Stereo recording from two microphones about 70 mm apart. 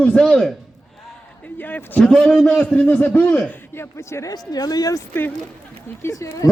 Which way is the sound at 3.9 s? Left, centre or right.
Left.